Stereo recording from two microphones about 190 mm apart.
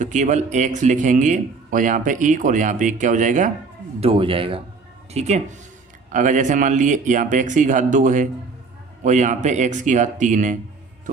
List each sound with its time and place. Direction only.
0.0 s a man's voice: 40° right (ahead or behind)
4.0 s a man's voice: 30° right (ahead or behind)